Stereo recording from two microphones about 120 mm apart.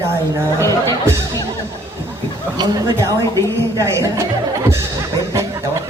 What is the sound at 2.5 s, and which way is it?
Speech, 35° right (ahead or behind).